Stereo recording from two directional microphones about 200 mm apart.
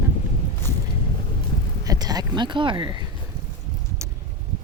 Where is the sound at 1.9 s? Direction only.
20° right (ahead or behind).